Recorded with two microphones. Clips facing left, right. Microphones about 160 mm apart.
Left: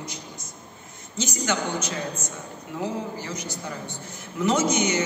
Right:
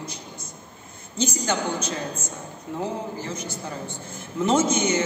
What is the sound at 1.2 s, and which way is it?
Speech, 30° right (ahead or behind).